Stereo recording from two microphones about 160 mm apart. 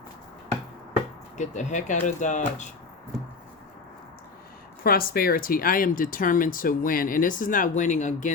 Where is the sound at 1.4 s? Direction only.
50° left (ahead or behind).